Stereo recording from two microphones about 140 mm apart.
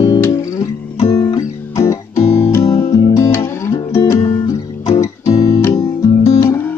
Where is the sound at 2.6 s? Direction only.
45° left (ahead or behind).